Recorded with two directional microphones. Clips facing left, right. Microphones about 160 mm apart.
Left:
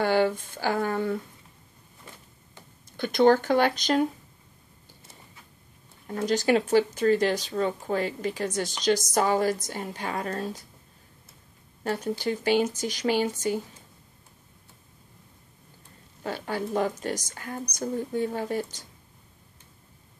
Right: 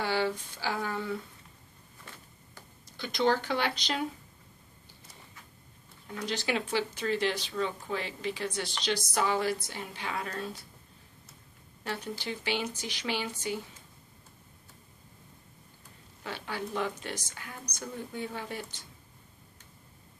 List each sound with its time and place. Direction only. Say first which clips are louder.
0.0 s speech: left 7 dB; 50° left (ahead or behind)
3.0 s speech: left 8 dB; 50° left (ahead or behind)
6.0 s speech: left 9 dB; 45° left (ahead or behind)
11.8 s speech: left 8 dB; 45° left (ahead or behind)
16.2 s speech: left 6 dB; 45° left (ahead or behind)